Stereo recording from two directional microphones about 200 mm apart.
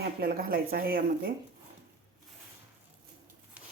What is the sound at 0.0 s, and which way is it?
Speech, 50° right (ahead or behind).